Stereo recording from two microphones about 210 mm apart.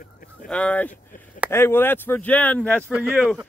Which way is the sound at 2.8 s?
10° right (ahead or behind).